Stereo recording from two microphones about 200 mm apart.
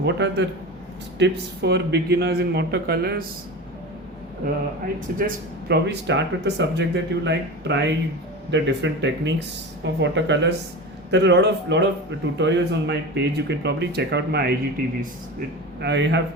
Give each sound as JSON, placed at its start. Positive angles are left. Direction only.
{"t": 0.0, "sound": "speech", "side_deg": -60}
{"t": 5.1, "sound": "a man's voice", "side_deg": -45}
{"t": 5.6, "sound": "speech", "side_deg": -55}
{"t": 15.8, "sound": "speech", "side_deg": -60}